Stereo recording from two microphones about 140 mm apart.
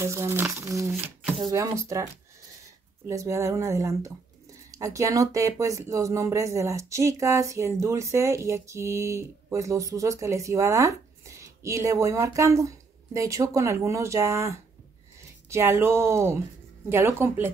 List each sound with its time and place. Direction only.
0.0 s speech: 20° right (ahead or behind)
3.1 s speech: 20° right (ahead or behind)